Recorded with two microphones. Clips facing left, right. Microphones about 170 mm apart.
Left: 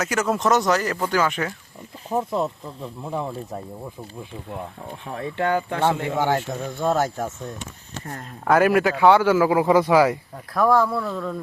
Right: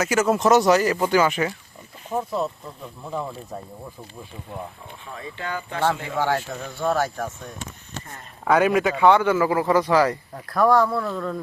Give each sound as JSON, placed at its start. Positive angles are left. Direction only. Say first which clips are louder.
{"t": 0.0, "sound": "speech", "louder": "right 3 dB", "side_deg": 0}
{"t": 2.1, "sound": "a man's voice", "louder": "left 2 dB", "side_deg": 15}
{"t": 5.0, "sound": "speech", "louder": "left 9 dB", "side_deg": 65}
{"t": 6.1, "sound": "speech", "louder": "left 2 dB", "side_deg": 20}
{"t": 8.4, "sound": "a man's voice", "louder": "left 1 dB", "side_deg": 0}
{"t": 10.3, "sound": "speech", "louder": "right 2 dB", "side_deg": 0}